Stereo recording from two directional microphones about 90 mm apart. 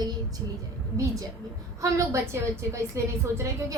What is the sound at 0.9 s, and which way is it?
Speech, 35° right (ahead or behind).